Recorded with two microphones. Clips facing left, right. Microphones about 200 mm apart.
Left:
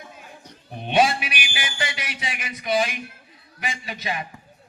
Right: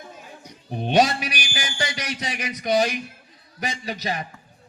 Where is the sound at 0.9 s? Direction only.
40° right (ahead or behind).